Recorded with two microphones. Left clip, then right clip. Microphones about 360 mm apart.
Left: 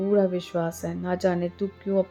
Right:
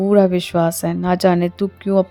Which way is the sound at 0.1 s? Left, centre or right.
Right.